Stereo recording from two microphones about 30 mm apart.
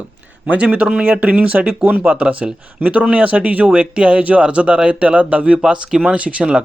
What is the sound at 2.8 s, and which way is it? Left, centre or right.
Speech, right.